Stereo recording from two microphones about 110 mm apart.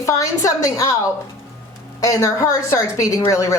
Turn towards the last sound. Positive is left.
turn(degrees=30)  # may be behind; listen again after turning